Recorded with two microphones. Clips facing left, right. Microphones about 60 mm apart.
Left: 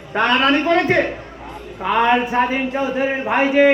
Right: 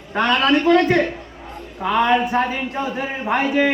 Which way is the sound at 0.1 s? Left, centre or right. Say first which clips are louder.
Left 1 dB; left.